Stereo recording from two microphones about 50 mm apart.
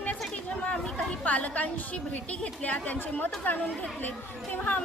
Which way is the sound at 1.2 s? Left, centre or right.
Left.